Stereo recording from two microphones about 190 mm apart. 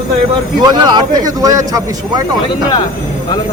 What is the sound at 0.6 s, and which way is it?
Speech, 20° right (ahead or behind).